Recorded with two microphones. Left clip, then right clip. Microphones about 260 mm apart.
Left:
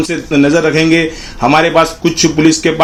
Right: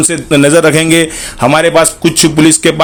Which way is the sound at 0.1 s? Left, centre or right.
Right.